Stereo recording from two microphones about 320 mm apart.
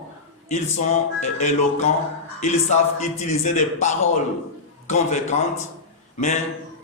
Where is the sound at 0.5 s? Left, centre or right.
Left.